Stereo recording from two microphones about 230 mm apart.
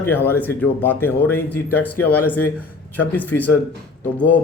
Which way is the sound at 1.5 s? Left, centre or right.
Left.